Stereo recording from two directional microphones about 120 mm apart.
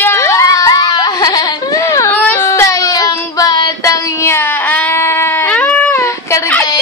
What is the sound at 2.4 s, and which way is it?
Child singing, 25° left (ahead or behind).